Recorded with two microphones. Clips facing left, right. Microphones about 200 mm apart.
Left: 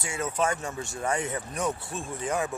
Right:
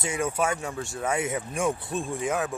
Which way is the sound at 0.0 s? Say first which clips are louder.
Right 4 dB; 20° right (ahead or behind).